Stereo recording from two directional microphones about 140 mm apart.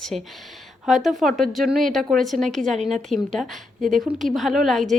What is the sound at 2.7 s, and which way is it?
Speech, 55° right (ahead or behind).